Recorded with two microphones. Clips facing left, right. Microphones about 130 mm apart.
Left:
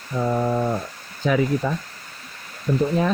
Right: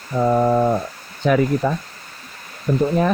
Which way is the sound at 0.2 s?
60° right (ahead or behind).